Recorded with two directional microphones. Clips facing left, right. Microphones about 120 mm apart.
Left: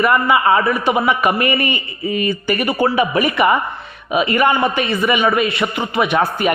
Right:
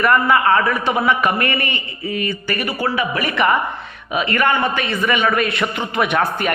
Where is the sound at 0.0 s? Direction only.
10° left (ahead or behind).